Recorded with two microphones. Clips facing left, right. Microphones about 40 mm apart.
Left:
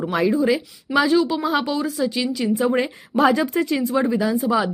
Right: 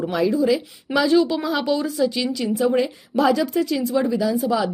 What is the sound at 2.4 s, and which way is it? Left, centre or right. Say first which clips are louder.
Speech: even; left.